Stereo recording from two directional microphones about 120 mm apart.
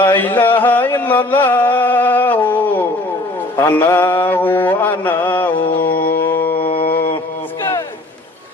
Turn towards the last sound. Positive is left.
turn(degrees=50)  # may be behind; listen again after turning